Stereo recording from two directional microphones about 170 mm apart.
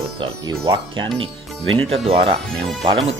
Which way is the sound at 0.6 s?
25° right (ahead or behind).